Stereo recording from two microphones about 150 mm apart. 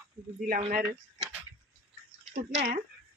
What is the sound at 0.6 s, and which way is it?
Speech, 50° right (ahead or behind).